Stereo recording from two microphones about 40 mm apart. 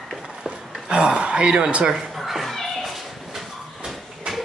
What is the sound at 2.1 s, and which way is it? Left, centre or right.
Children playing, centre.